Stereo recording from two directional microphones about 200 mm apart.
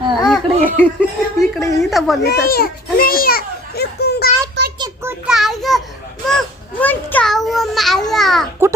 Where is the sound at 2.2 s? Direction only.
50° left (ahead or behind).